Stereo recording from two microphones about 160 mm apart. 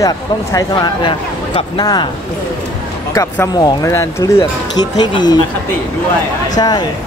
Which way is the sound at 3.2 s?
20° left (ahead or behind).